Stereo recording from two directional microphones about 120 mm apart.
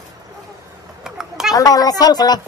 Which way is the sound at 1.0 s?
5° right (ahead or behind).